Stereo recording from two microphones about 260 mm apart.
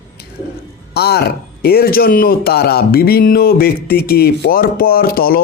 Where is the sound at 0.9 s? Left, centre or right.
Left.